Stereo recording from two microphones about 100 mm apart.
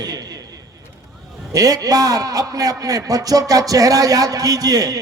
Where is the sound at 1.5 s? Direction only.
35° right (ahead or behind).